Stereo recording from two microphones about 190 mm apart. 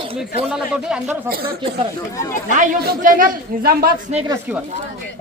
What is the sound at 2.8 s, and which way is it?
Speech, 45° right (ahead or behind).